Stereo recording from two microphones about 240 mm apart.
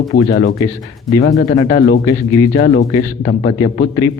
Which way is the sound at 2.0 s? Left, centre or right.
Centre.